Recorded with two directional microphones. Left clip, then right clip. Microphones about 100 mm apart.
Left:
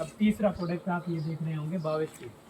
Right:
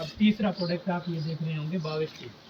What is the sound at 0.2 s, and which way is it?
Speech, 20° left (ahead or behind).